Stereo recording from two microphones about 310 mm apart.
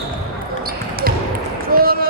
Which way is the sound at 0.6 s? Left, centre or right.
Right.